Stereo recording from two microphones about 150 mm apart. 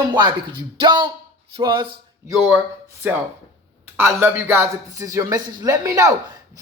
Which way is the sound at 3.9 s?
15° right (ahead or behind).